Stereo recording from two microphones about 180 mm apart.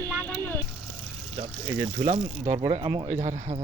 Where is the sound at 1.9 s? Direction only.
40° right (ahead or behind).